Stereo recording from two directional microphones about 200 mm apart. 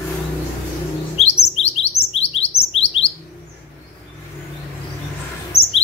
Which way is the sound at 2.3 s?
30° left (ahead or behind).